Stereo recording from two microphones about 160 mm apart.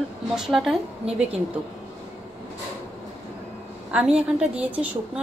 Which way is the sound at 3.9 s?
5° right (ahead or behind).